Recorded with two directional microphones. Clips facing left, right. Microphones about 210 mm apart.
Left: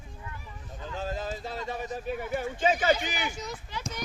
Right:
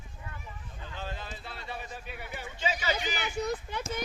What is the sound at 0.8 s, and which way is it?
Speech, 40° left (ahead or behind).